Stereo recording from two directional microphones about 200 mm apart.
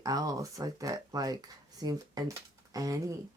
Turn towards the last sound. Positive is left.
turn(degrees=-15)  # may be behind; listen again after turning